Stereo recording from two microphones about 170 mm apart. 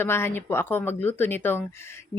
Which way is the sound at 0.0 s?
15° left (ahead or behind).